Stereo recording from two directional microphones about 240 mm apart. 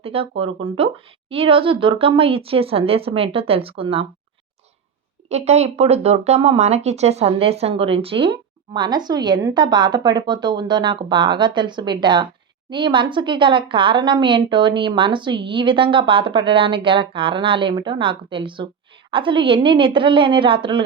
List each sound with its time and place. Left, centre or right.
0.0 s speech: right
5.3 s speech: right